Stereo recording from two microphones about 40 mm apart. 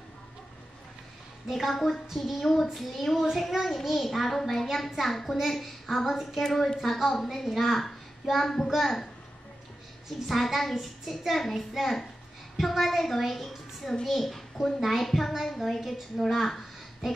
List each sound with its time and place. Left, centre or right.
1.5 s a woman's voice: centre
6.4 s a woman's voice: centre